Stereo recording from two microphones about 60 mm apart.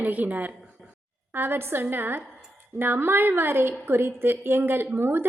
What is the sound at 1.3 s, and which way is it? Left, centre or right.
A woman's voice, right.